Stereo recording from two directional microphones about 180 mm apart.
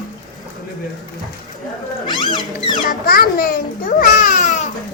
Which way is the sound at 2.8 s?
50° left (ahead or behind).